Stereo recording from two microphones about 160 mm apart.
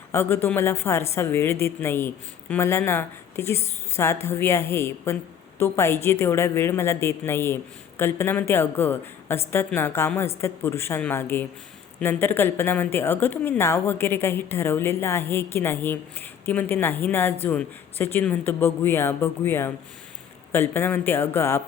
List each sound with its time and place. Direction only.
0.1 s a woman's voice: 15° left (ahead or behind)